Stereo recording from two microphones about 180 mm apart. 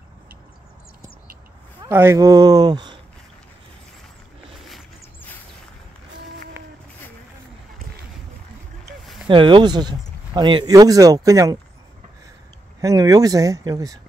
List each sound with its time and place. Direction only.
1.9 s speech: 15° right (ahead or behind)
9.0 s vehicle: centre (ahead or behind)
9.3 s speech: 25° right (ahead or behind)
12.8 s speech: 20° right (ahead or behind)